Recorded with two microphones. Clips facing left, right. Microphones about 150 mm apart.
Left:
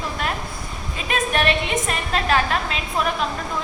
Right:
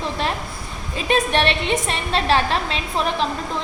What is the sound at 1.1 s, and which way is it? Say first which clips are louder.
A woman's voice: right 2 dB; 30° right (ahead or behind).